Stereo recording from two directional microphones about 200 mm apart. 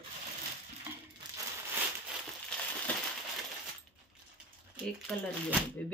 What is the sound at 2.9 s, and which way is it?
Crushing, 5° left (ahead or behind).